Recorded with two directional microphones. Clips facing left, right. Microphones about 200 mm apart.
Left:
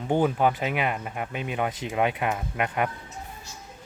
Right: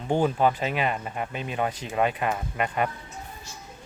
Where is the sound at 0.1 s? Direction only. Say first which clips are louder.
Even; 15° left (ahead or behind).